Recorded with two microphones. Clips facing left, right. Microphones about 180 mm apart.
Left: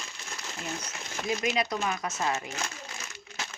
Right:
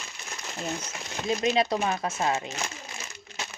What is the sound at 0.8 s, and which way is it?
Speech, 25° right (ahead or behind).